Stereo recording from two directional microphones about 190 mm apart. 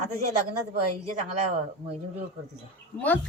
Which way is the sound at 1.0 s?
35° right (ahead or behind).